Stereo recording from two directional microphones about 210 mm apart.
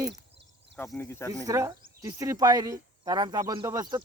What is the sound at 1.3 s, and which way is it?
Speech, 15° right (ahead or behind).